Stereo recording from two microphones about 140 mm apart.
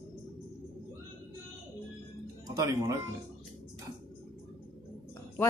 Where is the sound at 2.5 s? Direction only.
25° right (ahead or behind).